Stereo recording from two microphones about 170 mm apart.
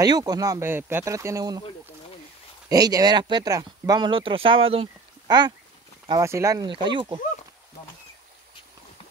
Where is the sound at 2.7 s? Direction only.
20° right (ahead or behind).